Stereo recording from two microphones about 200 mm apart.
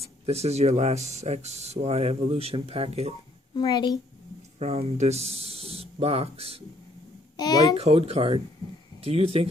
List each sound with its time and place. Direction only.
0.3 s speech: 30° right (ahead or behind)
3.5 s a woman's voice: 20° left (ahead or behind)
4.6 s speech: 30° right (ahead or behind)
7.3 s a woman's voice: 20° left (ahead or behind)
7.7 s speech: 30° right (ahead or behind)